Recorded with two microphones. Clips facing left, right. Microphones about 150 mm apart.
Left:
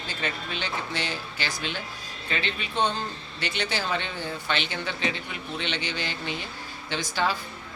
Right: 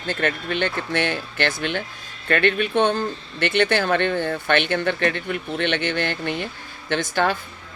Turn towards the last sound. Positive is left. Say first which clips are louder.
# right 6 dB
turn(degrees=-55)  # may be behind; listen again after turning